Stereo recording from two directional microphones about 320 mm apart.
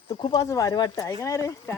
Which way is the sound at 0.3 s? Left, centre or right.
Centre.